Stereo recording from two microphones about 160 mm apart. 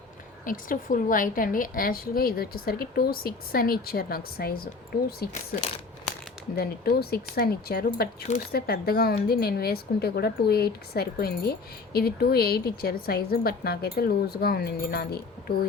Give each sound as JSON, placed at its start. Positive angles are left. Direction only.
{"t": 0.4, "sound": "a woman's voice", "side_deg": 60}
{"t": 6.6, "sound": "a woman's voice", "side_deg": 75}